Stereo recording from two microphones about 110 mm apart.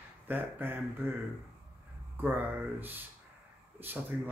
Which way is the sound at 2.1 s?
15° right (ahead or behind).